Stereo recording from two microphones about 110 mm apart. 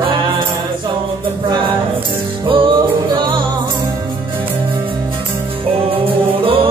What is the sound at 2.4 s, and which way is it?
Music, 50° right (ahead or behind).